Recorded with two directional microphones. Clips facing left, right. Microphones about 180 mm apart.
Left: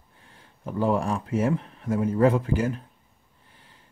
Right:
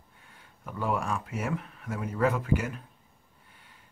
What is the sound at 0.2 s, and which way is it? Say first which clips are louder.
Speech: left 8 dB; 30° left (ahead or behind).